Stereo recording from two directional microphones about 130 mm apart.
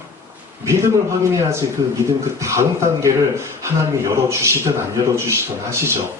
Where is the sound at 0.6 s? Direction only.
25° right (ahead or behind).